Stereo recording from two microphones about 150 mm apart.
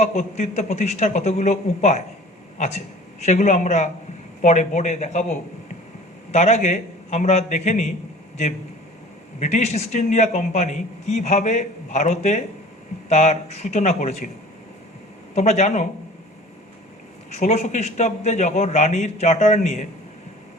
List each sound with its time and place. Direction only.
0.0 s a man's voice: 45° left (ahead or behind)
9.4 s a man's voice: 45° left (ahead or behind)
15.4 s a man's voice: 45° left (ahead or behind)
17.3 s a man's voice: 50° left (ahead or behind)